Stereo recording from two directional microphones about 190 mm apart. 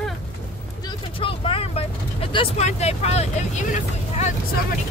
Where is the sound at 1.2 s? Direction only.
30° left (ahead or behind).